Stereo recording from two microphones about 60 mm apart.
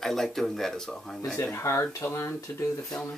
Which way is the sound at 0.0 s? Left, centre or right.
Centre.